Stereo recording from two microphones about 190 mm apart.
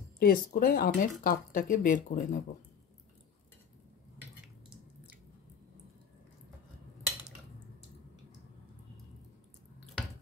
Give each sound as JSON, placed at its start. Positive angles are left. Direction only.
{"t": 0.2, "sound": "speech", "side_deg": 50}